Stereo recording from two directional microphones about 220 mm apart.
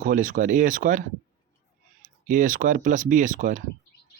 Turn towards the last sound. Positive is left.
turn(degrees=-35)  # may be behind; listen again after turning